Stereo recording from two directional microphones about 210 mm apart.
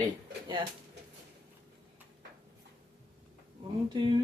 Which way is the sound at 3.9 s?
20° right (ahead or behind).